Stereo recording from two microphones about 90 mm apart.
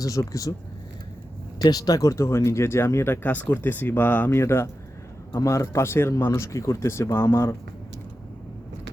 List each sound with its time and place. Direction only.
0.0 s speech: 40° left (ahead or behind)
1.5 s speech: 45° left (ahead or behind); by 7.5 s 30° left (ahead or behind)